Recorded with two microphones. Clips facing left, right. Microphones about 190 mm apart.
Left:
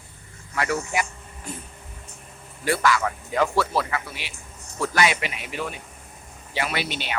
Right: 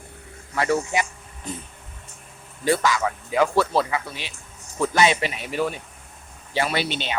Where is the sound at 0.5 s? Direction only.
25° right (ahead or behind).